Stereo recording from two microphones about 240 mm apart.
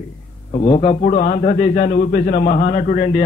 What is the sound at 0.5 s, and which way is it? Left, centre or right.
A man's voice, left.